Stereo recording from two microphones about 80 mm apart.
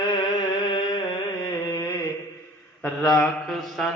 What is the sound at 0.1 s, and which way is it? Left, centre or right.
Music, left.